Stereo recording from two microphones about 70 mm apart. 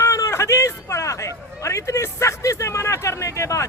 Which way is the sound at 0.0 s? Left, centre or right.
Left.